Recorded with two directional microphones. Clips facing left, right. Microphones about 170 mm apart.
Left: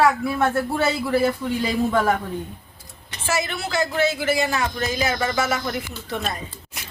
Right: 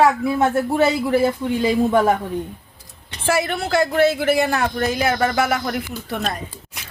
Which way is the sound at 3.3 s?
55° right (ahead or behind).